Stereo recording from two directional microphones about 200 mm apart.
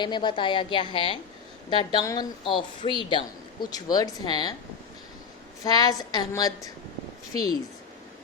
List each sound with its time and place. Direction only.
0.0 s a woman's voice: 20° left (ahead or behind)
5.6 s a woman's voice: 20° left (ahead or behind)